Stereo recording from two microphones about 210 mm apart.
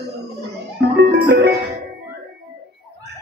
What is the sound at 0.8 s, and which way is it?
Music, 55° right (ahead or behind).